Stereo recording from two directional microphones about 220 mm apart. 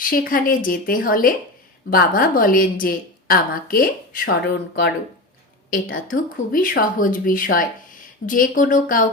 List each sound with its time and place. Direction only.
0.0 s a woman's voice: 40° left (ahead or behind)
6.3 s a woman's voice: 40° left (ahead or behind)